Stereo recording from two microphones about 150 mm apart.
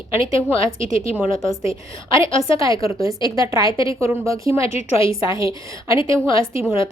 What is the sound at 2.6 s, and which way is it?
A woman's voice, 20° right (ahead or behind).